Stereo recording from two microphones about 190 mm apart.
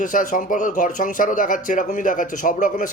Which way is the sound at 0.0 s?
45° left (ahead or behind).